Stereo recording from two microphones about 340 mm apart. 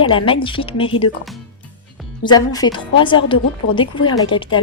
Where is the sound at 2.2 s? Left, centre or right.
Centre.